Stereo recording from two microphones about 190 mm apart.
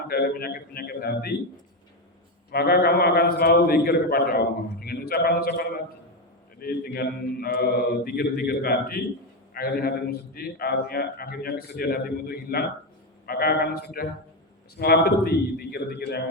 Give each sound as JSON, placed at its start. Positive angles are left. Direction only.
{"t": 0.1, "sound": "a man's voice", "side_deg": 50}
{"t": 2.5, "sound": "a man's voice", "side_deg": 55}